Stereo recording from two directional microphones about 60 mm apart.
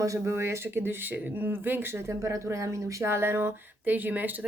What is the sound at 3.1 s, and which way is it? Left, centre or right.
Speech, right.